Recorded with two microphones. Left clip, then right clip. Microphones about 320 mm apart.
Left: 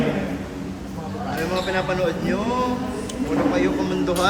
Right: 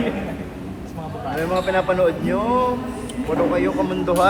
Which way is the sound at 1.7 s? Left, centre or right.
Centre.